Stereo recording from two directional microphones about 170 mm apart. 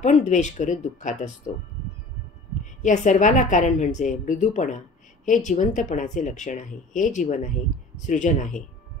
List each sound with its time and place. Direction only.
0.0 s a woman's voice: 45° left (ahead or behind)
2.6 s a woman's voice: 45° left (ahead or behind)